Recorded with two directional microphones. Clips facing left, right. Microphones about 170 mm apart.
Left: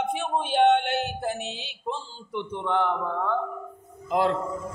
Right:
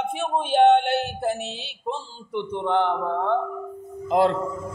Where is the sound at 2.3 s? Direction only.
30° right (ahead or behind).